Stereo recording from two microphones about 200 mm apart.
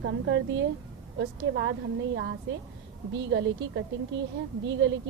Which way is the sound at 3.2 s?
65° right (ahead or behind).